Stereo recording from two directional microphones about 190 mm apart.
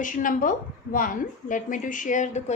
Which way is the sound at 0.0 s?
45° left (ahead or behind).